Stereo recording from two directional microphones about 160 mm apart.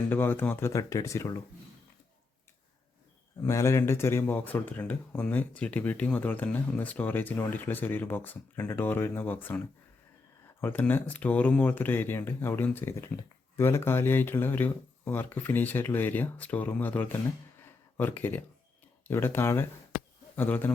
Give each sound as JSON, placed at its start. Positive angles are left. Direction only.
{"t": 0.1, "sound": "speech", "side_deg": 10}
{"t": 3.4, "sound": "speech", "side_deg": 20}
{"t": 10.6, "sound": "speech", "side_deg": 10}
{"t": 17.7, "sound": "a sound", "side_deg": 15}
{"t": 19.0, "sound": "a man's voice", "side_deg": 15}